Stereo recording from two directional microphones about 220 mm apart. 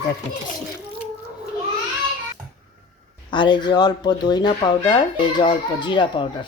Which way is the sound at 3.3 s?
20° left (ahead or behind).